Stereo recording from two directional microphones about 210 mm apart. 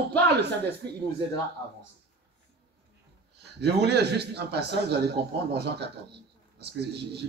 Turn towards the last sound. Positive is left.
turn(degrees=-50)  # may be behind; listen again after turning